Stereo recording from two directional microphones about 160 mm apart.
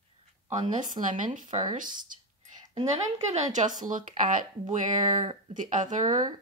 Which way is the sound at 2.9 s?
45° right (ahead or behind).